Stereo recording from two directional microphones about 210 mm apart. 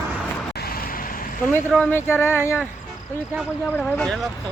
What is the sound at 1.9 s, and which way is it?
Speech, 10° left (ahead or behind).